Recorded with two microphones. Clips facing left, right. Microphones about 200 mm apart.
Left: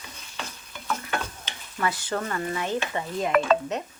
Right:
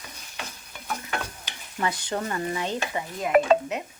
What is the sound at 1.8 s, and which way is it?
Stir, 20° right (ahead or behind).